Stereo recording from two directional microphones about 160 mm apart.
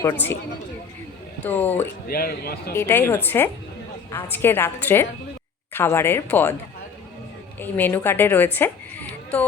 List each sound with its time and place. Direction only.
0.0 s a woman's voice: 15° left (ahead or behind)
1.5 s a woman's voice: 10° left (ahead or behind)
2.0 s speech: 70° left (ahead or behind)
2.7 s a woman's voice: 15° left (ahead or behind)
7.6 s a woman's voice: 10° left (ahead or behind)